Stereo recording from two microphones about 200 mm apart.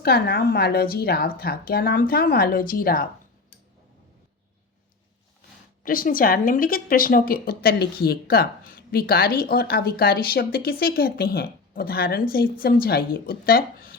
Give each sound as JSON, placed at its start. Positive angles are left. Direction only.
{"t": 0.0, "sound": "a woman's voice", "side_deg": 55}
{"t": 5.8, "sound": "a woman's voice", "side_deg": 45}